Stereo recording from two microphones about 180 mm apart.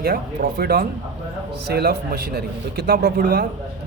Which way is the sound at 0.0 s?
60° right (ahead or behind).